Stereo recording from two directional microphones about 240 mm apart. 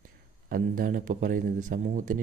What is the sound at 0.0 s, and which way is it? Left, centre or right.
Speech, right.